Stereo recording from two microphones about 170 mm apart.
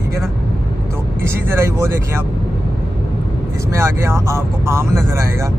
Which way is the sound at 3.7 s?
15° right (ahead or behind).